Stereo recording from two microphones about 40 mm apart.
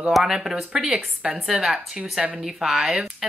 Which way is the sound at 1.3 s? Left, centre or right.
Right.